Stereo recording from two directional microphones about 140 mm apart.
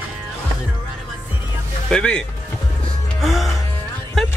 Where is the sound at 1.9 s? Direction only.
5° left (ahead or behind).